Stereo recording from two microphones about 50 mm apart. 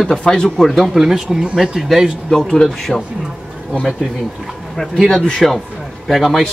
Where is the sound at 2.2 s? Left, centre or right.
Centre.